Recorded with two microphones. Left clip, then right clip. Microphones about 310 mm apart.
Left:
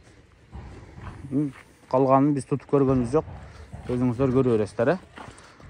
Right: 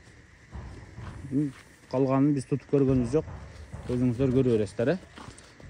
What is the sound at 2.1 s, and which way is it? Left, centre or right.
Speech, centre.